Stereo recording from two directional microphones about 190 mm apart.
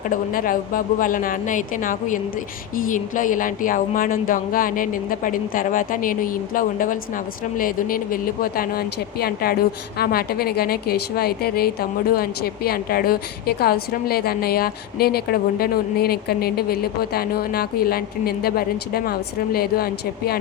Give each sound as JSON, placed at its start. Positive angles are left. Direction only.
{"t": 0.1, "sound": "a woman's voice", "side_deg": 45}